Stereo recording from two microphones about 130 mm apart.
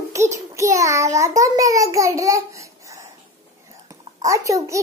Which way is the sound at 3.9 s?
25° right (ahead or behind).